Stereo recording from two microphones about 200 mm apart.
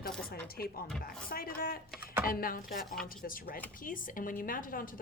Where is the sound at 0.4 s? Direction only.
50° left (ahead or behind).